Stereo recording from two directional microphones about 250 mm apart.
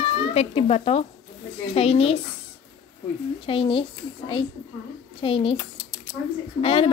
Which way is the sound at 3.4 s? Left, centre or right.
Left.